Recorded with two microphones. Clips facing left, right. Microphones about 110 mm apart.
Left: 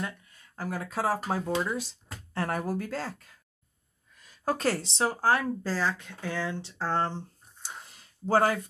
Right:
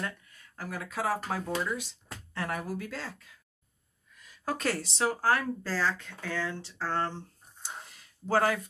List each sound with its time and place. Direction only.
0.0 s speech: 30° left (ahead or behind)
2.3 s speech: 40° left (ahead or behind)
4.2 s speech: 30° left (ahead or behind)
7.9 s a sound: 30° left (ahead or behind)